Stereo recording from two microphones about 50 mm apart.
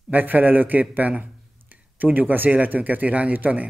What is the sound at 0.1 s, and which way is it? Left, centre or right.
A man's voice, right.